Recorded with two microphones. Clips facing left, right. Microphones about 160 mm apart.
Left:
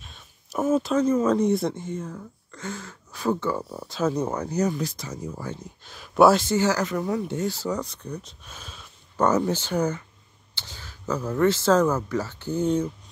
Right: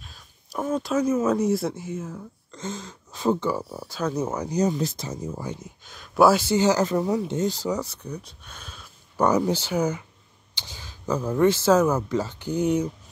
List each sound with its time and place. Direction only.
0.0 s a sound: centre (ahead or behind)
0.9 s speech: 10° right (ahead or behind)
2.5 s speech: 20° right (ahead or behind)
3.5 s speech: 5° right (ahead or behind); by 5.6 s 20° right (ahead or behind)
5.6 s speech: centre (ahead or behind)
6.5 s speech: 20° right (ahead or behind); by 9.2 s centre (ahead or behind)
9.2 s speech: 10° right (ahead or behind)